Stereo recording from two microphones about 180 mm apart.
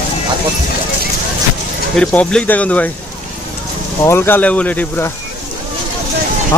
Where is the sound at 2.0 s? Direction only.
5° left (ahead or behind).